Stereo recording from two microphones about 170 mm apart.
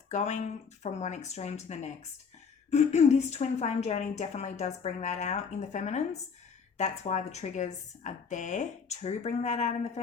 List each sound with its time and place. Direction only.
0.1 s a woman's voice: 40° left (ahead or behind)